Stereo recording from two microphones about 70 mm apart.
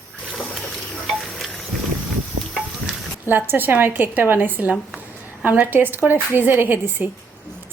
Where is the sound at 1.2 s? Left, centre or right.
Centre.